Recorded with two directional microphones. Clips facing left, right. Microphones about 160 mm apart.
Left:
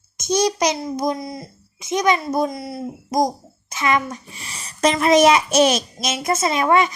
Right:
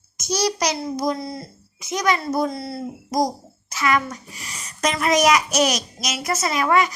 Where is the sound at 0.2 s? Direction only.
25° left (ahead or behind).